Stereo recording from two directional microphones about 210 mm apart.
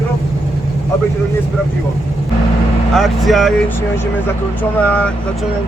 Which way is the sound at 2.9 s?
Centre (ahead or behind).